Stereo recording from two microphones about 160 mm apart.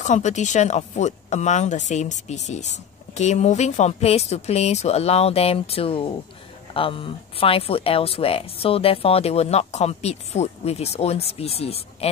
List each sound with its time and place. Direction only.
0.0 s speech: 50° left (ahead or behind)